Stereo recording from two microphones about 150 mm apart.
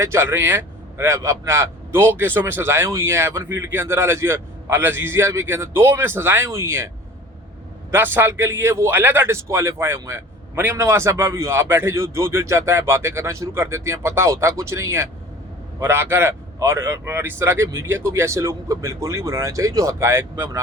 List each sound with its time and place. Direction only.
0.0 s a man's voice: 15° right (ahead or behind)